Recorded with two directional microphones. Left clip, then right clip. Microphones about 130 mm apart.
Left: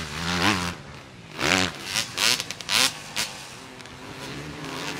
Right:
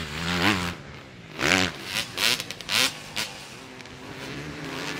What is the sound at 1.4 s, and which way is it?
Vehicle, 5° right (ahead or behind).